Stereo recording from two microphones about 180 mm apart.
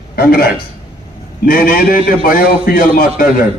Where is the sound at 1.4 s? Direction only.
50° left (ahead or behind).